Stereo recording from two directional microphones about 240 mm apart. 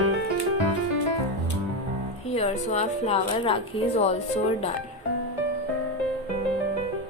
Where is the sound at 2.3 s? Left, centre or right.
Left.